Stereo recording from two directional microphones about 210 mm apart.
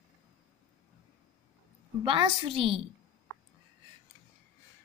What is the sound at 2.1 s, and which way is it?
Speech, 25° right (ahead or behind).